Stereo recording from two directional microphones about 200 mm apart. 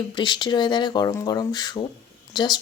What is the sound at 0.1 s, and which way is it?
Speech, 20° left (ahead or behind).